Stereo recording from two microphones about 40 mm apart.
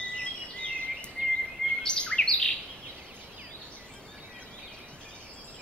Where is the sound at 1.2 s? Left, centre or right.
Right.